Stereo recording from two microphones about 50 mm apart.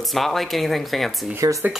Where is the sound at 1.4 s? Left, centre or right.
Right.